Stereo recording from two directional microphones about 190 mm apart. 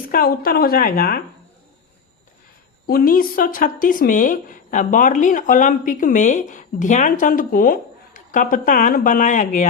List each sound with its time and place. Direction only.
0.1 s speech: 50° left (ahead or behind)
2.8 s speech: 50° left (ahead or behind)